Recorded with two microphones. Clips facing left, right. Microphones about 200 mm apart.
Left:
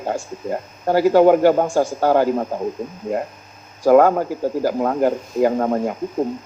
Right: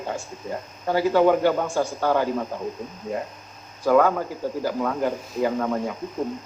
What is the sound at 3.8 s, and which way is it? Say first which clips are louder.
Speech: left 6 dB; 45° left (ahead or behind).